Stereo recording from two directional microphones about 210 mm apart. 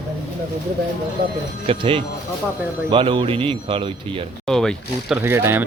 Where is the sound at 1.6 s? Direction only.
25° right (ahead or behind).